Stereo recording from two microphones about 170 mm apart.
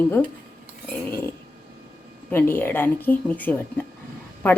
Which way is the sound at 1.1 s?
15° left (ahead or behind).